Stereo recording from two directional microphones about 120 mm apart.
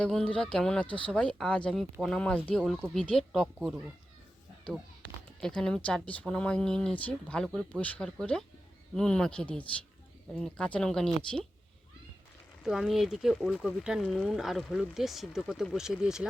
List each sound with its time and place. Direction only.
0.0 s speech: 5° left (ahead or behind)
5.4 s speech: 5° left (ahead or behind)
12.6 s speech: centre (ahead or behind)